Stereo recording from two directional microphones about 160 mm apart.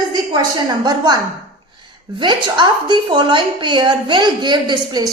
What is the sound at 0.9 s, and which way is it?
Speech, 25° right (ahead or behind).